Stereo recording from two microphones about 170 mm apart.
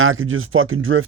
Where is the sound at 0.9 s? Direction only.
90° right.